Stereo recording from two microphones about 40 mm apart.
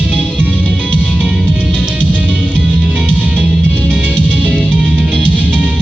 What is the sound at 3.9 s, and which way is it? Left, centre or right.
Music, right.